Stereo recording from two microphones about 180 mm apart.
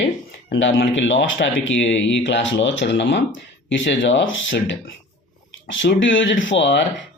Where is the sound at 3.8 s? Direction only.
90° left.